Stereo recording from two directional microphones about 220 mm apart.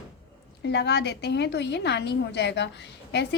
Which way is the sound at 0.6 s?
50° left (ahead or behind).